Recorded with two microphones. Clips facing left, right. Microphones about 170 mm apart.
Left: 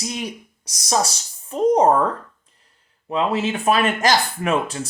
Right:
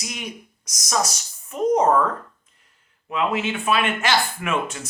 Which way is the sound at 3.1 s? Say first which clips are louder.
Left 3 dB; 35° left (ahead or behind).